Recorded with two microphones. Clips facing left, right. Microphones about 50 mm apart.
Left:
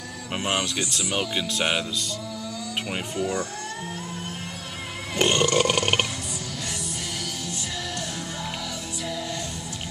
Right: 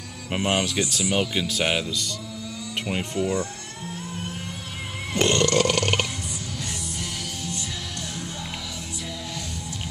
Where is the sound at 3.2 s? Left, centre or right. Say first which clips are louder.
Right 2 dB; centre.